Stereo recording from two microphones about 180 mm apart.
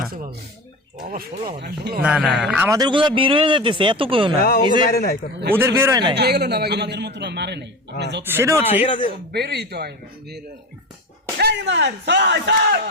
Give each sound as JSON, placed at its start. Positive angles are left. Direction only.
{"t": 0.0, "sound": "speech", "side_deg": -55}
{"t": 1.6, "sound": "speech", "side_deg": -65}
{"t": 2.0, "sound": "speech", "side_deg": -5}
{"t": 2.7, "sound": "speech", "side_deg": -25}
{"t": 4.4, "sound": "speech", "side_deg": 55}
{"t": 5.5, "sound": "speech", "side_deg": -15}
{"t": 6.1, "sound": "a man's voice", "side_deg": -65}
{"t": 8.2, "sound": "speech", "side_deg": -10}
{"t": 8.6, "sound": "speech", "side_deg": 35}
{"t": 9.3, "sound": "a man's voice", "side_deg": -65}